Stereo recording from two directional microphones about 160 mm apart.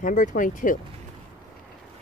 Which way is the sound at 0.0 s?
55° left (ahead or behind).